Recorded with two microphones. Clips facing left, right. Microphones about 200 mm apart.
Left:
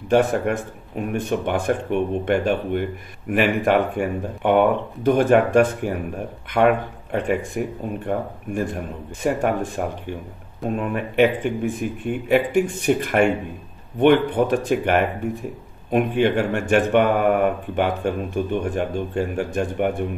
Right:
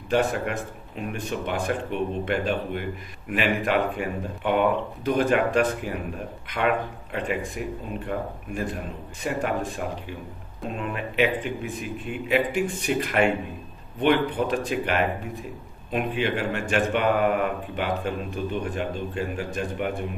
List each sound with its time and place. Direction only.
0.1 s speech: 50° left (ahead or behind)
9.2 s speech: 50° left (ahead or behind)